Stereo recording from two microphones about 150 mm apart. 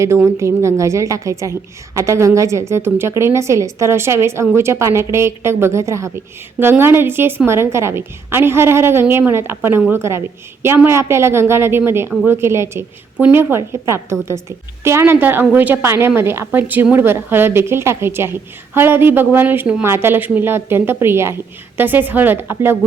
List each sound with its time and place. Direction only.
0.0 s a woman's voice: 20° right (ahead or behind)